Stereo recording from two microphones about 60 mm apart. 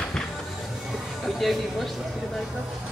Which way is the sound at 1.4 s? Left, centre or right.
Centre.